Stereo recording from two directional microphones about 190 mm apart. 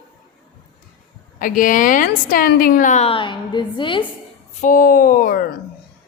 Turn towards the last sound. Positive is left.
turn(degrees=50)  # may be behind; listen again after turning